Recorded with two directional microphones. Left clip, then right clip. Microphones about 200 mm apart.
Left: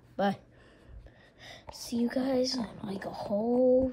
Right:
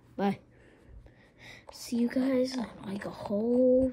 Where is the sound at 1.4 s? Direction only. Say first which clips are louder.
Left 1 dB; 5° left (ahead or behind).